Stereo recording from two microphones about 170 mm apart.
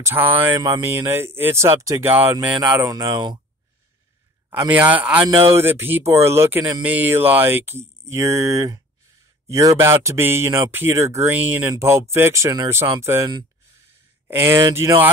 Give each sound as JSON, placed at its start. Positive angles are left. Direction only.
{"t": 0.0, "sound": "speech", "side_deg": -10}
{"t": 2.9, "sound": "speech", "side_deg": -20}
{"t": 4.7, "sound": "speech", "side_deg": -10}